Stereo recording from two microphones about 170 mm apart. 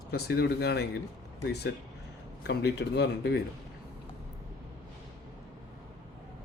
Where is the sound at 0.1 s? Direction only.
65° left (ahead or behind).